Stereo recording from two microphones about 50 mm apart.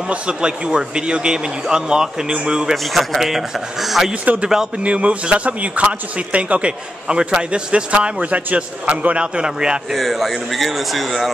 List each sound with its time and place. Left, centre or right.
0.1 s a man's voice: centre
2.7 s a man's voice: centre
4.1 s a man's voice: right
9.9 s a man's voice: centre